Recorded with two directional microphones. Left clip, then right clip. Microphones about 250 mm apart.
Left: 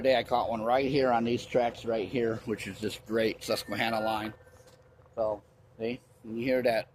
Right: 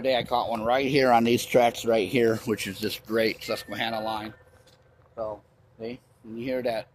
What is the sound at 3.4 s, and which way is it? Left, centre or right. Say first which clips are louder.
Speech: right 1 dB; centre.